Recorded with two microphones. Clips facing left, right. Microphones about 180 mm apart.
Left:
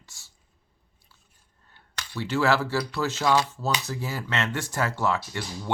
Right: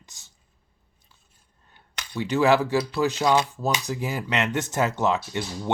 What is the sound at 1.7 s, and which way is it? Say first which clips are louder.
Speech: right 2 dB; 15° right (ahead or behind).